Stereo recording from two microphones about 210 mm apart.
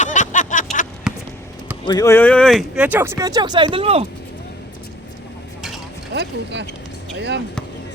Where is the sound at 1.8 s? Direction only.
15° left (ahead or behind); by 4.0 s 25° right (ahead or behind).